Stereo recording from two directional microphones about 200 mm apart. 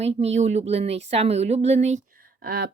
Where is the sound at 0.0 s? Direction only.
30° right (ahead or behind).